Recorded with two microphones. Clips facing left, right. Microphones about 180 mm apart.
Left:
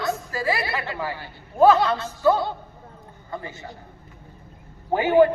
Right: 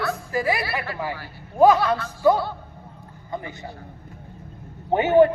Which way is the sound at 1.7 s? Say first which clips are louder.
Even; 25° left (ahead or behind).